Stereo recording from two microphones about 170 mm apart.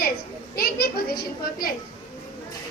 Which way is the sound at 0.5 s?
65° left (ahead or behind).